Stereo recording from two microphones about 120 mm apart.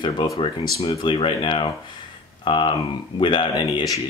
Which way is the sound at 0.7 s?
50° left (ahead or behind).